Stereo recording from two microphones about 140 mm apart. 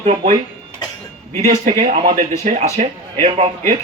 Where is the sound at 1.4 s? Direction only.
60° right (ahead or behind).